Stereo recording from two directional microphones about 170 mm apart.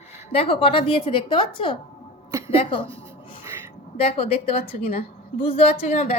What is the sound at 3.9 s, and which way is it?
A woman's voice, 35° left (ahead or behind).